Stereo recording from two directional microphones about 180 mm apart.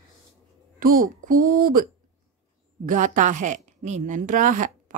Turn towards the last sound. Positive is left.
turn(degrees=-45)  # may be behind; listen again after turning